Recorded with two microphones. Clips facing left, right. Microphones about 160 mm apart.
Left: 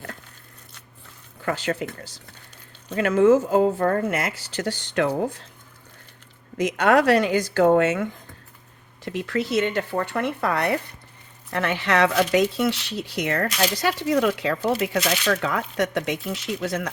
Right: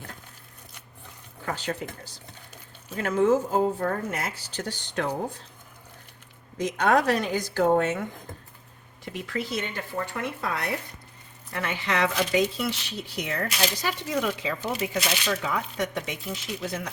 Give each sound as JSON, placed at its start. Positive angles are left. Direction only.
{"t": 1.5, "sound": "speech", "side_deg": 80}
{"t": 6.6, "sound": "speech", "side_deg": 85}
{"t": 9.0, "sound": "speech", "side_deg": 85}